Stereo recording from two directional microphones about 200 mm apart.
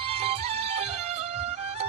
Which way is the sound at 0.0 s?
30° right (ahead or behind).